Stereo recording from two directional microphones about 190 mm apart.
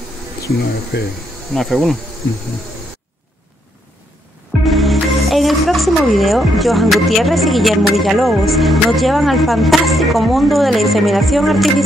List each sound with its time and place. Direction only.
0.9 s speech: 60° left (ahead or behind)
1.5 s speech: centre (ahead or behind)
4.6 s speech: centre (ahead or behind)